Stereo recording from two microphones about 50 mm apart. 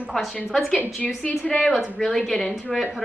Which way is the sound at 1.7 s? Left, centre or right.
Centre.